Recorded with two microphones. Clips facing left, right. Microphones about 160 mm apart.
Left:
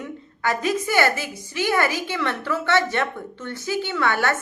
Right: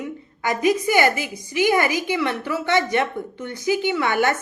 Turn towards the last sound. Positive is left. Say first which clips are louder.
# right 3 dB
turn(degrees=-15)  # may be behind; listen again after turning